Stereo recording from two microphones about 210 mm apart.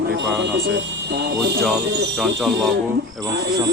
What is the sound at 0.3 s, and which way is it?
Speech, 55° right (ahead or behind).